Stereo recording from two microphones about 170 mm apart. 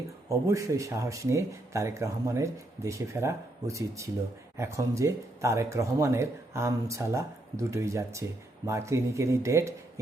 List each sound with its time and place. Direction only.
0.3 s speech: 20° right (ahead or behind)